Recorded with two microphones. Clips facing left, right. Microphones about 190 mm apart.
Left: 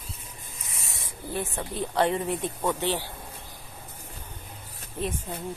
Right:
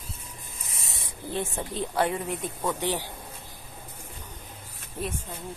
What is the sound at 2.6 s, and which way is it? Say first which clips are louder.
Speech: even; 15° right (ahead or behind).